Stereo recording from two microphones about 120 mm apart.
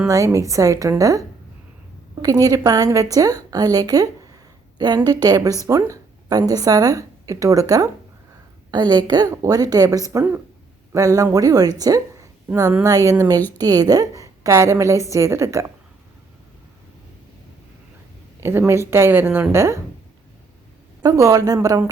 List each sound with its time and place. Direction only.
0.1 s a woman's voice: 25° right (ahead or behind)
2.2 s a woman's voice: 30° right (ahead or behind)
5.2 s a woman's voice: 30° right (ahead or behind)
18.3 s a woman's voice: 20° right (ahead or behind)
21.0 s a woman's voice: 25° right (ahead or behind)